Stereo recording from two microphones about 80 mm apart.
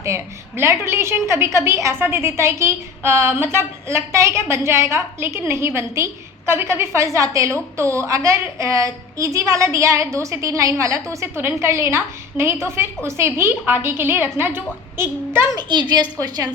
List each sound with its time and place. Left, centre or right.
0.0 s a woman's voice: right
15.5 s a woman's voice: right
16.1 s a woman's voice: right